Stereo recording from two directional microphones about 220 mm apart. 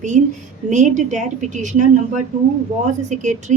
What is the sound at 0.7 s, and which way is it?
Speech, 35° right (ahead or behind).